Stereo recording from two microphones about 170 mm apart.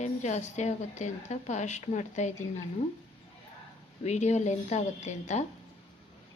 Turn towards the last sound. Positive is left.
turn(degrees=40)  # may be behind; listen again after turning